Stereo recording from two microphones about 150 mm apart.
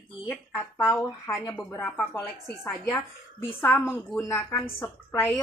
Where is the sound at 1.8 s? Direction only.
10° left (ahead or behind).